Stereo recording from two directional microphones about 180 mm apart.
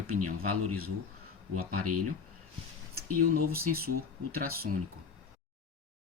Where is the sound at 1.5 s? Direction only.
45° right (ahead or behind).